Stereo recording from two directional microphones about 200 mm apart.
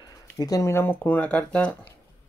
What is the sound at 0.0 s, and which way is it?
Speech, 20° left (ahead or behind).